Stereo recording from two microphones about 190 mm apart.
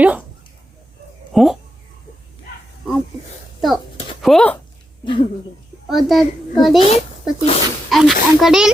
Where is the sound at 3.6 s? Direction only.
Centre (ahead or behind).